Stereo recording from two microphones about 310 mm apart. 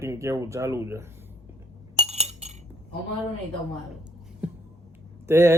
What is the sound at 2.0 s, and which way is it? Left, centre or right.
Chink, centre.